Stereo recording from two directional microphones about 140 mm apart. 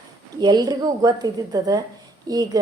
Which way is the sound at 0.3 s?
30° right (ahead or behind).